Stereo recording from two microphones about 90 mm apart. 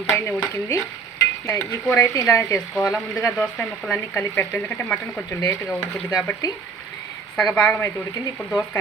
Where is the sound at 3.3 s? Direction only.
15° left (ahead or behind).